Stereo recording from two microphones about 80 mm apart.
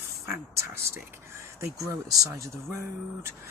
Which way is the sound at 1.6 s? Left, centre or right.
Right.